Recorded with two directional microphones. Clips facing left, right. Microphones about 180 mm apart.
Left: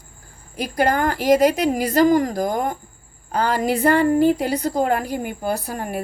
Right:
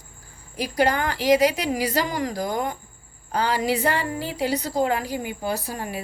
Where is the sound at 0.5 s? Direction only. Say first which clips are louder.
Left 2 dB; 50° left (ahead or behind).